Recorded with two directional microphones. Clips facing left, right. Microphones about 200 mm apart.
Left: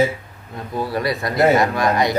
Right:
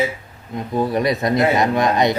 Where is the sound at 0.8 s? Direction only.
20° right (ahead or behind).